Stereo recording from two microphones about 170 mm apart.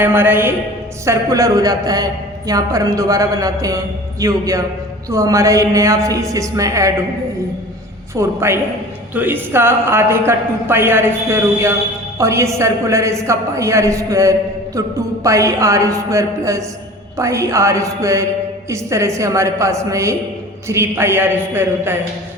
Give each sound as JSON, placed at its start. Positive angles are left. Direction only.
{"t": 0.0, "sound": "a woman's voice", "side_deg": -10}
{"t": 8.1, "sound": "a woman's voice", "side_deg": -15}